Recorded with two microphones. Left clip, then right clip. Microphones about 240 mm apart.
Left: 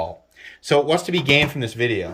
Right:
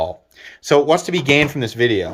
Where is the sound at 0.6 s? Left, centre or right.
Centre.